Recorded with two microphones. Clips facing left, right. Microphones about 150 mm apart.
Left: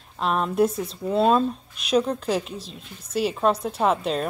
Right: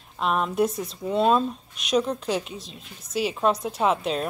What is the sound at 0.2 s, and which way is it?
Speech, centre (ahead or behind).